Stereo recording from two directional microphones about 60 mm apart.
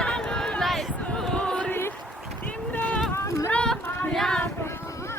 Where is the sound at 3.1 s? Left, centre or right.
Left.